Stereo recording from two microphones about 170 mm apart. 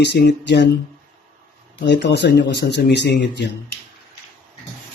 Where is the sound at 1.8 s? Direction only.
85° left.